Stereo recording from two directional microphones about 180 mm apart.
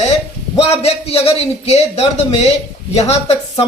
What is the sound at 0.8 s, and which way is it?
Speech, 35° left (ahead or behind).